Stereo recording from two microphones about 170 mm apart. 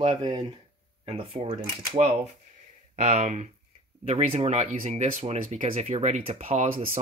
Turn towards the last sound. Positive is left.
turn(degrees=-35)  # may be behind; listen again after turning